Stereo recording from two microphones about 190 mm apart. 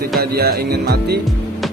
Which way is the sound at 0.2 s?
55° right (ahead or behind).